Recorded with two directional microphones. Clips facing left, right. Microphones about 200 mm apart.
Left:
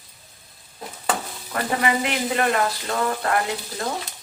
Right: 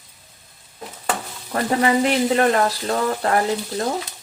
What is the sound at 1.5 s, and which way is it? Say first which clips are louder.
Speech: right 4 dB; 35° right (ahead or behind).